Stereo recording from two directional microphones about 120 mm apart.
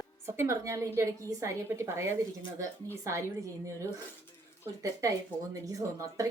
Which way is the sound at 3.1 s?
25° right (ahead or behind).